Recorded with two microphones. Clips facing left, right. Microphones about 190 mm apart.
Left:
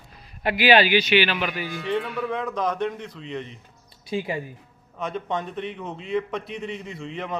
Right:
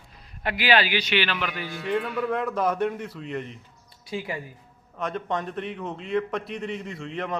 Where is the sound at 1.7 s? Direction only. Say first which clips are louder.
Right 3 dB; 5° right (ahead or behind).